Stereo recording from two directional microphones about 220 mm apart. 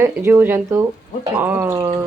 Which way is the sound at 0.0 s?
10° right (ahead or behind).